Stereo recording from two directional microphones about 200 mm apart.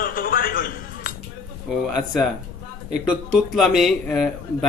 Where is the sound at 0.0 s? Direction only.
45° left (ahead or behind).